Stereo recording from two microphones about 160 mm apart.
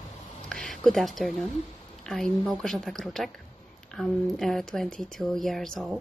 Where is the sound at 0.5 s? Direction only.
Centre (ahead or behind).